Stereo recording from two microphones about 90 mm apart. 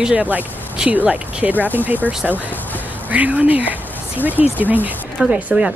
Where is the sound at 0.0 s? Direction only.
15° right (ahead or behind).